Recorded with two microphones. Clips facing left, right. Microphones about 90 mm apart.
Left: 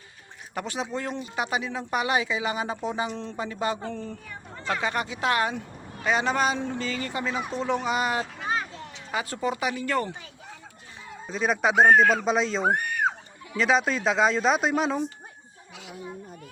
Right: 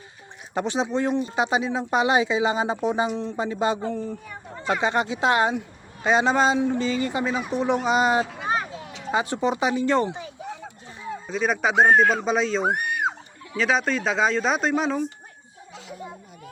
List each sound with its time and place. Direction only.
0.5 s speech: 20° right (ahead or behind)
8.4 s vehicle: 20° right (ahead or behind)
9.1 s speech: 20° right (ahead or behind)
11.3 s speech: centre (ahead or behind)
12.6 s a sound: 20° right (ahead or behind)
13.6 s speech: centre (ahead or behind)